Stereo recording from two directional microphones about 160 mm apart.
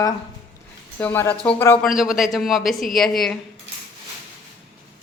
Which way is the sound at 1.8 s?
5° right (ahead or behind).